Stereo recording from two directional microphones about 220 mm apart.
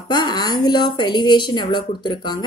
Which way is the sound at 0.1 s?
20° left (ahead or behind).